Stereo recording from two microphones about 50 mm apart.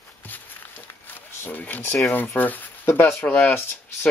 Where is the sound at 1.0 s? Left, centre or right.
Left.